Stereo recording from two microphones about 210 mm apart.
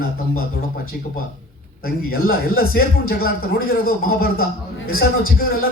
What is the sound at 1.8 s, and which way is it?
Speech, 45° left (ahead or behind).